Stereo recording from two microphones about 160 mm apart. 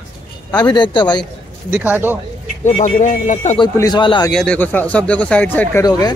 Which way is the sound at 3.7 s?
25° left (ahead or behind).